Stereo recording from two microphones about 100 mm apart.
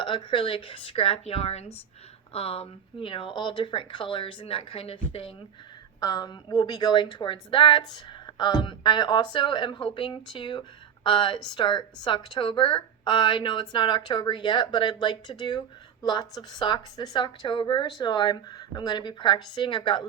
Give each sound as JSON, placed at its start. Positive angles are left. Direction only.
{"t": 0.0, "sound": "speech", "side_deg": 55}
{"t": 6.0, "sound": "speech", "side_deg": 40}